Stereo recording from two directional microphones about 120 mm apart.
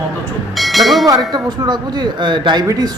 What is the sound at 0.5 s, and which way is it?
Bell, centre (ahead or behind).